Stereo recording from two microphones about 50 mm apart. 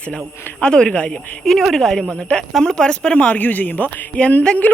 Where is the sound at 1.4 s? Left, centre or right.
Centre.